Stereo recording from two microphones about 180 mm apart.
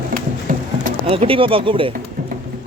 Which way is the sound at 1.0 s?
30° right (ahead or behind).